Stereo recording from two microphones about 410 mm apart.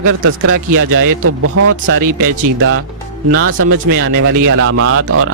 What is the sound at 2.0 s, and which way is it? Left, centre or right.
Speech, right.